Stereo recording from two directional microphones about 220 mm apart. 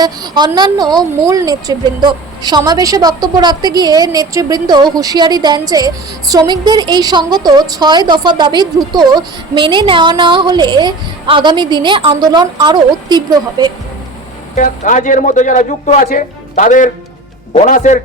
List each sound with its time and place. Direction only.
0.0 s a woman's voice: 20° right (ahead or behind)
14.5 s a man's voice: 35° left (ahead or behind)